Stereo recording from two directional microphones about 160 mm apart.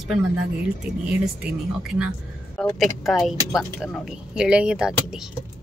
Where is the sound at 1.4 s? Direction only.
5° right (ahead or behind).